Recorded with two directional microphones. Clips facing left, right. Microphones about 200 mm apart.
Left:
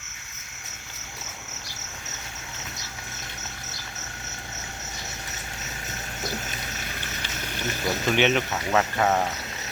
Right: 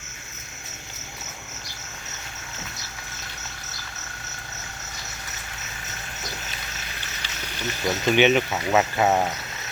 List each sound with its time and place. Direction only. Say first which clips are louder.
7.0 s a sound: left 3 dB; 50° left (ahead or behind)
8.1 s speech: right 4 dB; 5° right (ahead or behind)
8.8 s speech: right 2 dB; 15° right (ahead or behind)